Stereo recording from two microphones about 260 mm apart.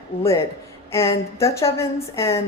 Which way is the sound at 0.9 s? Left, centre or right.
Centre.